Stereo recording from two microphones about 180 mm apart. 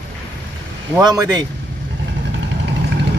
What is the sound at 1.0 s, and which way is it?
Speech, 20° right (ahead or behind).